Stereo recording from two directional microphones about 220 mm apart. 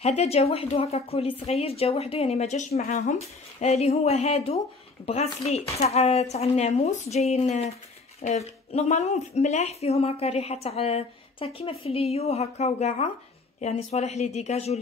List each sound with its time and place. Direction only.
0.0 s a woman's voice: 30° left (ahead or behind)